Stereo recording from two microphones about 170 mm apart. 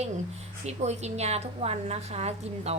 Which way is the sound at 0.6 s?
40° right (ahead or behind).